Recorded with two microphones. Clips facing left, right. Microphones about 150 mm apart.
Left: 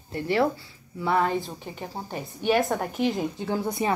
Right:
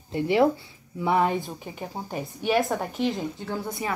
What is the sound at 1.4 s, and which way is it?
Speech, 5° right (ahead or behind).